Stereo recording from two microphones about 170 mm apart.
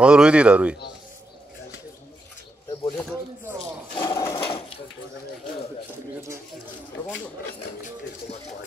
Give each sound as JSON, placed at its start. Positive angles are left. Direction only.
{"t": 0.0, "sound": "speech", "side_deg": -5}
{"t": 3.9, "sound": "speech", "side_deg": 20}